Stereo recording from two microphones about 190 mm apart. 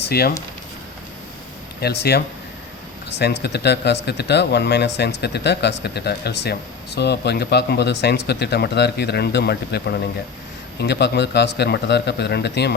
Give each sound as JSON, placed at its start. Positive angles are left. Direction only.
{"t": 0.0, "sound": "speech", "side_deg": 55}
{"t": 1.8, "sound": "speech", "side_deg": 60}